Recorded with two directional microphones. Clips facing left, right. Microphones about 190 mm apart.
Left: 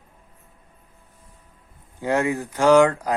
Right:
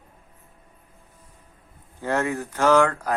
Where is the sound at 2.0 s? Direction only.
15° left (ahead or behind).